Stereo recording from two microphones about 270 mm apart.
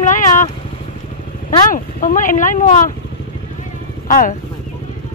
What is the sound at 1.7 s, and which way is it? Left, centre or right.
Speech, left.